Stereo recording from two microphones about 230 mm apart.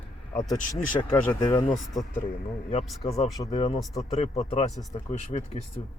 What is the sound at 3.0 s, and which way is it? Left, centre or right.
A man's voice, left.